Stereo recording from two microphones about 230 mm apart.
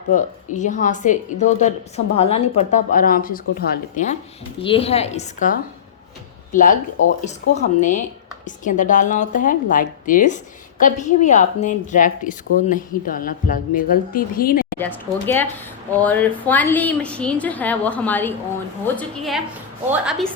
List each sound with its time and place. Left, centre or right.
0.1 s a woman's voice: left
14.8 s a woman's voice: centre